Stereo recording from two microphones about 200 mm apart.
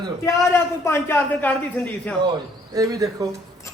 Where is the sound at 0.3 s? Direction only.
15° left (ahead or behind).